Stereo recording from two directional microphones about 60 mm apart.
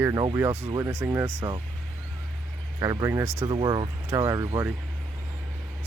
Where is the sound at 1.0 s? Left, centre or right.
Right.